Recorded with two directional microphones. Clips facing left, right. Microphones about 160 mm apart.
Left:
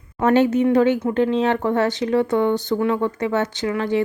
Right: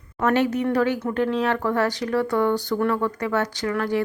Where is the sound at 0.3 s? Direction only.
25° left (ahead or behind).